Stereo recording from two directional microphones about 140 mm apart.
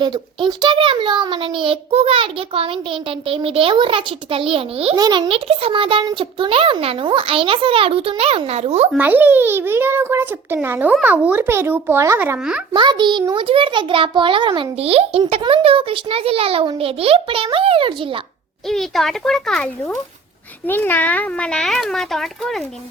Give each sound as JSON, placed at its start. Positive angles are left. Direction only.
{"t": 0.0, "sound": "a child's voice", "side_deg": -35}
{"t": 4.9, "sound": "a child's voice", "side_deg": -30}
{"t": 9.0, "sound": "a child's voice", "side_deg": -10}
{"t": 12.4, "sound": "a child's voice", "side_deg": -5}
{"t": 12.7, "sound": "a child's voice", "side_deg": -35}
{"t": 18.7, "sound": "a child's voice", "side_deg": 0}